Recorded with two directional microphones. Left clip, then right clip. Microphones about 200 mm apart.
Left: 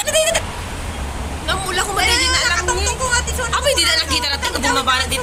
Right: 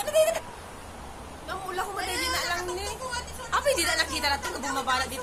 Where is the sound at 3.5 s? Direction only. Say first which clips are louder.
Left 8 dB; 55° right (ahead or behind).